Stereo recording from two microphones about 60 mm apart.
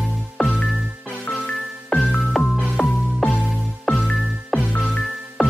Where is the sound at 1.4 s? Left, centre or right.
Centre.